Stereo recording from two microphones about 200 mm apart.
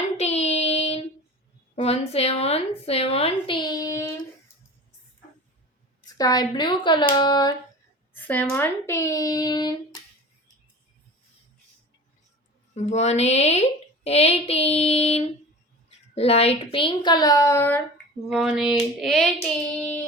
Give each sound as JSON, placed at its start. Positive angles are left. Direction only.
{"t": 0.2, "sound": "child singing", "side_deg": 35}
{"t": 1.7, "sound": "a woman's voice", "side_deg": 30}
{"t": 6.1, "sound": "a woman's voice", "side_deg": 20}
{"t": 8.1, "sound": "speech", "side_deg": 10}
{"t": 12.7, "sound": "a woman's voice", "side_deg": 35}
{"t": 18.3, "sound": "child singing", "side_deg": 0}